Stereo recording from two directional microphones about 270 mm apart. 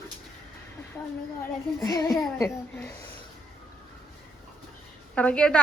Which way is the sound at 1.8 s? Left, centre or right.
Centre.